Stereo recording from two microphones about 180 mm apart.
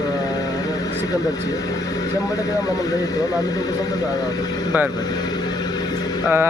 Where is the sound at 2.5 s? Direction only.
20° left (ahead or behind).